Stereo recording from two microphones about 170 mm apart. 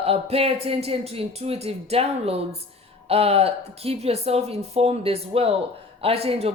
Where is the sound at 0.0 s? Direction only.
35° right (ahead or behind).